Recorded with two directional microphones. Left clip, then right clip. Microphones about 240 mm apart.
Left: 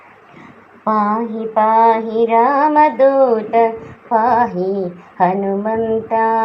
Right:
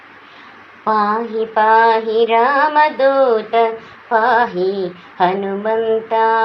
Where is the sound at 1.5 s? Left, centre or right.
Right.